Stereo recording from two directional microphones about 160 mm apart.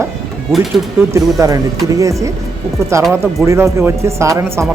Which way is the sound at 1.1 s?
20° right (ahead or behind).